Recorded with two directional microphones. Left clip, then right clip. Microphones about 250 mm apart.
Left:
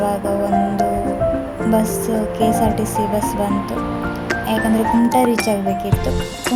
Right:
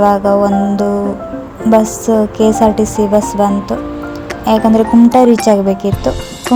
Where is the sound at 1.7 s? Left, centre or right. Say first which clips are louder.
Right 9 dB; right.